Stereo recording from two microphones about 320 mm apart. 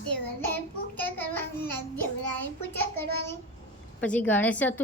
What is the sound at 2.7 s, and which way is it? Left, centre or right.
A woman's voice, centre.